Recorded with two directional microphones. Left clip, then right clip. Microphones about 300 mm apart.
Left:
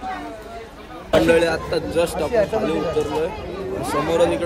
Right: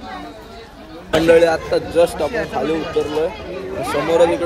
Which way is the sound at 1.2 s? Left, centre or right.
Centre.